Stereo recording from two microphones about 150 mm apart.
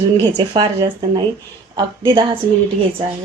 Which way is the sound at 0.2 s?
30° right (ahead or behind).